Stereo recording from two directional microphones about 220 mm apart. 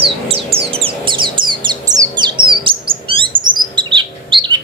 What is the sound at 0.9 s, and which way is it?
Bird, 20° right (ahead or behind).